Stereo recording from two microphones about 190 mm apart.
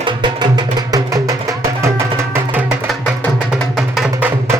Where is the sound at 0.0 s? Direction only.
25° right (ahead or behind); by 4.3 s centre (ahead or behind).